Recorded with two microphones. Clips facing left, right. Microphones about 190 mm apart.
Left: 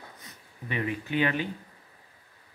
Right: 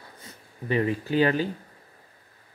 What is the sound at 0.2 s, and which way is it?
Speech, 35° right (ahead or behind).